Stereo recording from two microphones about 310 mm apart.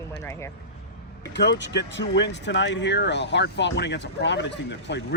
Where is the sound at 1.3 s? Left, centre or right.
Left.